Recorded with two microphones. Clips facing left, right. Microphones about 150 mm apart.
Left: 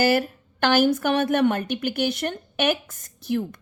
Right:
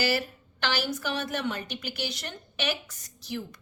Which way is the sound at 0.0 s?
50° left (ahead or behind).